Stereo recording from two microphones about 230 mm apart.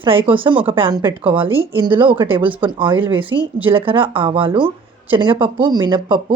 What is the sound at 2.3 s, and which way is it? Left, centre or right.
Speech, right.